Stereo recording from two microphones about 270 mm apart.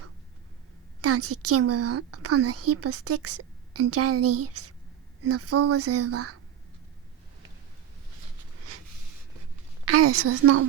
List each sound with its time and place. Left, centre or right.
1.0 s a woman's voice: right
9.8 s a woman's voice: right